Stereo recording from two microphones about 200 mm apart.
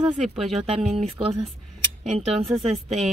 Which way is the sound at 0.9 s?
25° right (ahead or behind).